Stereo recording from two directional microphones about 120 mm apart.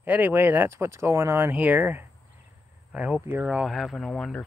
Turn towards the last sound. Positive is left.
turn(degrees=5)  # may be behind; listen again after turning